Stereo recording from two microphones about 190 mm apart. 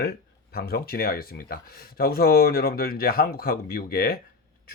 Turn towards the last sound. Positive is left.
turn(degrees=55)  # may be behind; listen again after turning